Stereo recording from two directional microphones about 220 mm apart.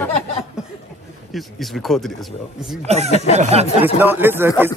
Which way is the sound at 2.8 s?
30° right (ahead or behind).